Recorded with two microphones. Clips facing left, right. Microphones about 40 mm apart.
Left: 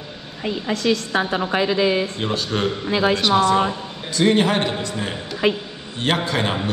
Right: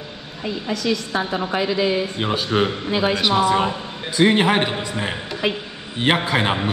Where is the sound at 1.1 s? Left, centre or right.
Left.